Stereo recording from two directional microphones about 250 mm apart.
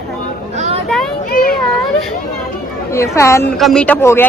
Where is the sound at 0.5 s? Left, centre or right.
Right.